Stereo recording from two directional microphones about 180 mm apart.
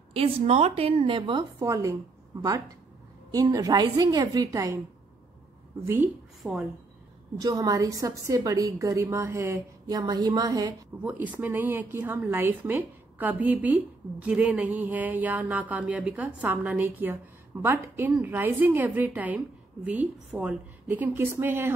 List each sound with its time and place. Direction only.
0.1 s a woman's voice: 35° right (ahead or behind); by 4.7 s 20° right (ahead or behind)
6.4 s a woman's voice: 10° right (ahead or behind)
7.3 s a woman's voice: 20° right (ahead or behind)
11.0 s a woman's voice: 10° right (ahead or behind)